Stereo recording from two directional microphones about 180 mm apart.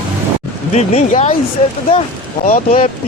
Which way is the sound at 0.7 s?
35° left (ahead or behind).